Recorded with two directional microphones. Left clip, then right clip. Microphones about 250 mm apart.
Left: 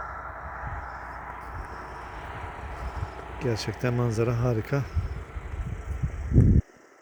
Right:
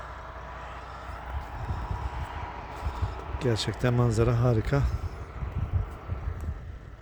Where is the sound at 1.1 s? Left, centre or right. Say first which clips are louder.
Left 2 dB; right.